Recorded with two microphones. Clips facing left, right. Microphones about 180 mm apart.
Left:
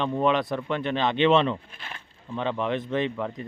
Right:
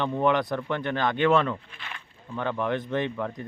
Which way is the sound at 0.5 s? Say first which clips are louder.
Left 1 dB; 15° left (ahead or behind).